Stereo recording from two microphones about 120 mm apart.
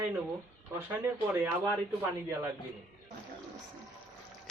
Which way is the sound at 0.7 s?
15° right (ahead or behind).